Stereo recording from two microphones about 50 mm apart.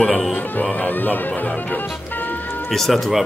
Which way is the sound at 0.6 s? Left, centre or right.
Left.